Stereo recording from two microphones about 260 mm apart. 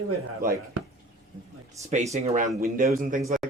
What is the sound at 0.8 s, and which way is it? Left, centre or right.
Speech, right.